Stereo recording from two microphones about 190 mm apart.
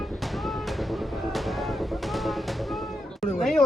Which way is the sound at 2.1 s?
Centre (ahead or behind).